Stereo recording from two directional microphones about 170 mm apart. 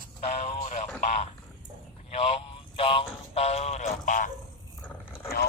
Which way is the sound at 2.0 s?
35° left (ahead or behind).